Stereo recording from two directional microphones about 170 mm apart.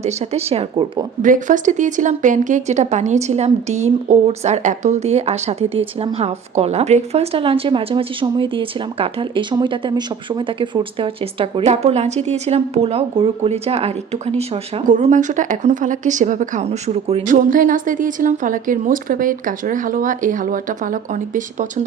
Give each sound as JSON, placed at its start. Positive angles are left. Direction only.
{"t": 0.0, "sound": "a woman's voice", "side_deg": -40}
{"t": 1.2, "sound": "a woman's voice", "side_deg": -50}
{"t": 17.3, "sound": "a woman's voice", "side_deg": -50}